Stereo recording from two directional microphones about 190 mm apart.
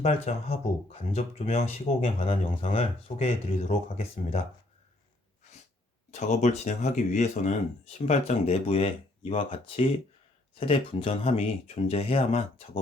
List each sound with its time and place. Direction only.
0.0 s speech: 30° left (ahead or behind)
6.1 s speech: 40° left (ahead or behind)